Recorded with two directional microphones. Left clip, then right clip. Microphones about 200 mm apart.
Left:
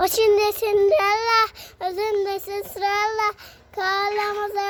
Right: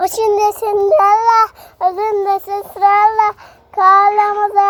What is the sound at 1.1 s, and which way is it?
A child's voice, 20° left (ahead or behind).